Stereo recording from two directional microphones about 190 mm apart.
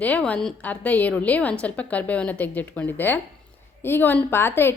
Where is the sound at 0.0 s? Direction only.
5° left (ahead or behind).